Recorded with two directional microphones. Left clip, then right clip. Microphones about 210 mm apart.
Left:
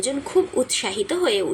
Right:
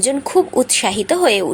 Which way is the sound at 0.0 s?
45° right (ahead or behind).